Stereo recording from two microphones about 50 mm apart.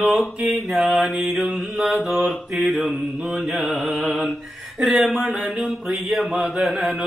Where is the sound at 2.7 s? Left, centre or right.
Centre.